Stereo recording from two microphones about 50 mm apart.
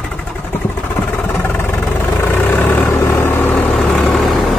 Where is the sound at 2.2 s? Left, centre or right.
Left.